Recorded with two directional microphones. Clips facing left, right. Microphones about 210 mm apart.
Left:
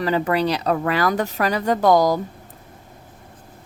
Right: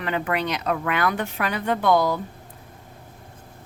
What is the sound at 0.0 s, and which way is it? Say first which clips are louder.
Speech: left 5 dB; 35° left (ahead or behind).